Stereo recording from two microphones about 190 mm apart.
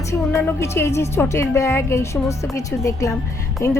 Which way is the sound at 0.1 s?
15° left (ahead or behind).